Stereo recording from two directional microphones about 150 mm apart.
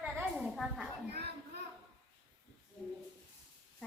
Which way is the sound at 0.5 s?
Centre (ahead or behind).